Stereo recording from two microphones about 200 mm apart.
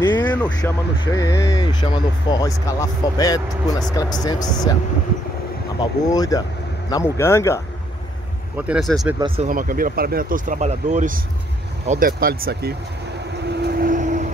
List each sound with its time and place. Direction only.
0.0 s a sound: 20° left (ahead or behind)
0.6 s speech: 20° left (ahead or behind)
5.8 s speech: 20° left (ahead or behind)
8.5 s speech: 5° right (ahead or behind)
9.5 s speech: 45° right (ahead or behind)
13.5 s vehicle: 50° right (ahead or behind)